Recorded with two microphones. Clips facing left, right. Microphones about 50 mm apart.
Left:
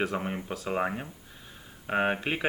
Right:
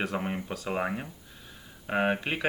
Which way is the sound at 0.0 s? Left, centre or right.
Centre.